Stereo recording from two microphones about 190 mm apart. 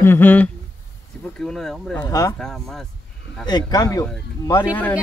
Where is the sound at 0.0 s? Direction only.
10° left (ahead or behind).